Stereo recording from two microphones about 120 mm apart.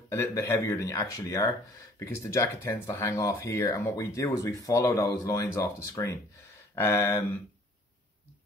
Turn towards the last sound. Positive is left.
turn(degrees=20)  # may be behind; listen again after turning